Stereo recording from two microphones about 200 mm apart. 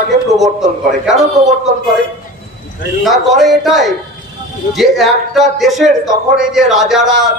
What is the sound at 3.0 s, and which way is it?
Speech, centre (ahead or behind).